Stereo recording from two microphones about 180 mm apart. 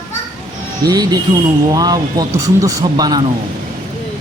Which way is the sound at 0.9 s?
20° right (ahead or behind).